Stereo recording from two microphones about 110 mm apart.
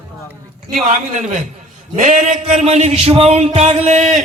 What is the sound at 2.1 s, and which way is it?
Speech, 90° right.